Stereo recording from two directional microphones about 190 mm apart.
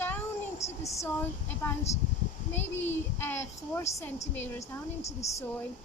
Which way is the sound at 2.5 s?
10° left (ahead or behind).